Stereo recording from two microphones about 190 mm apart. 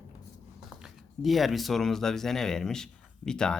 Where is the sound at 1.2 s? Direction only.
Centre (ahead or behind).